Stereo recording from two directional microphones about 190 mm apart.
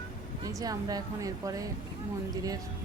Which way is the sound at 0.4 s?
20° right (ahead or behind).